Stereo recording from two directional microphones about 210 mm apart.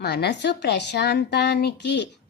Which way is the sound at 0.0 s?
50° left (ahead or behind).